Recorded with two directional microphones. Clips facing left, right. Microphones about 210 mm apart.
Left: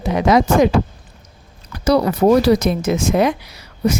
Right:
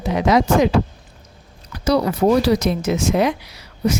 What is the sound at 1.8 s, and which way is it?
Speech, 55° left (ahead or behind).